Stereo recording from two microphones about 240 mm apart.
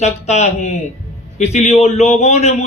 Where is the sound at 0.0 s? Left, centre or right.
Left.